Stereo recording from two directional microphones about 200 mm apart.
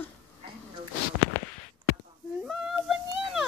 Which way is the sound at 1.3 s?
25° left (ahead or behind).